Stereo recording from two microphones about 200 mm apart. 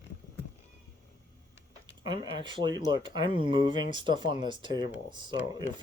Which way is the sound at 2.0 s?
20° right (ahead or behind).